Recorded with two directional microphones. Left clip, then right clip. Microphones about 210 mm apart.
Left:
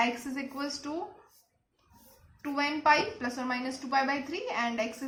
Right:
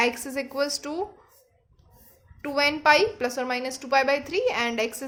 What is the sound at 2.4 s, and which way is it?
A woman's voice, 50° right (ahead or behind).